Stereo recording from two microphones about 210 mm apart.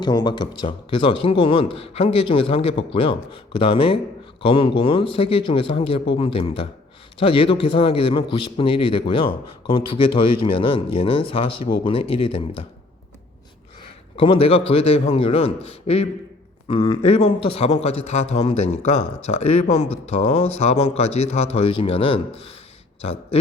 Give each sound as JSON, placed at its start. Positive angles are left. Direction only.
{"t": 0.0, "sound": "a man's voice", "side_deg": 20}
{"t": 14.2, "sound": "a man's voice", "side_deg": 25}
{"t": 16.6, "sound": "a man's voice", "side_deg": 25}